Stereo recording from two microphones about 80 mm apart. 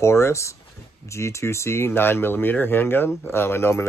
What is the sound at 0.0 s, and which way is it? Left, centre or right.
Speech, left.